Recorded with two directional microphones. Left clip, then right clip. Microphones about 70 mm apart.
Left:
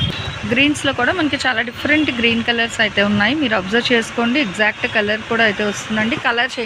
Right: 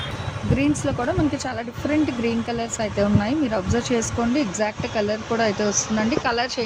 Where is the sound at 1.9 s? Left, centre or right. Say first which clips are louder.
Left 7 dB; centre.